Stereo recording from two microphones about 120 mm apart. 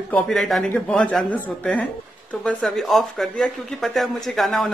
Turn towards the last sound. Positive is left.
turn(degrees=0)  # may be behind; listen again after turning